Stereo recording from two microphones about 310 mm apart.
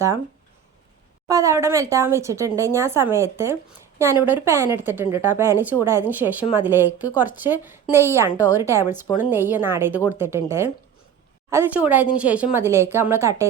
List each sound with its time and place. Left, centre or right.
1.3 s a woman's voice: centre
8.3 s a woman's voice: centre
8.6 s speech: centre